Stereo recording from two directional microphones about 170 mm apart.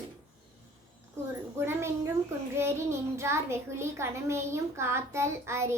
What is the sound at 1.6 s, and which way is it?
A woman's voice, 15° right (ahead or behind).